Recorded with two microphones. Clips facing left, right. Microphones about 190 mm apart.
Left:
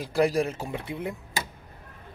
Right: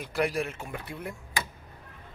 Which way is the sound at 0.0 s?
35° left (ahead or behind).